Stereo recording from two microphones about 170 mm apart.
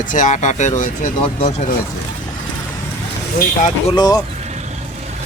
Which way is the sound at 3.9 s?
25° left (ahead or behind).